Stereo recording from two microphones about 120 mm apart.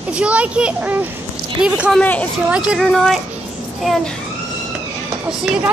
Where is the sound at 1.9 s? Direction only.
10° left (ahead or behind).